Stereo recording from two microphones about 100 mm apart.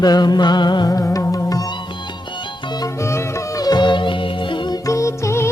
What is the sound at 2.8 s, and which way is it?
Music, 30° left (ahead or behind).